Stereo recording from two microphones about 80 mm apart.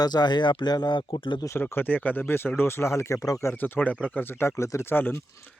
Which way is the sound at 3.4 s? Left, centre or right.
Left.